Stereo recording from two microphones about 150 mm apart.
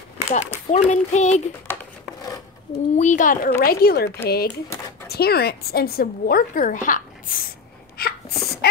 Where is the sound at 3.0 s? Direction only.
55° left (ahead or behind).